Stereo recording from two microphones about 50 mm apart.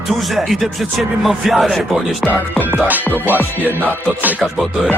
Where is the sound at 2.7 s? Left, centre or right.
Right.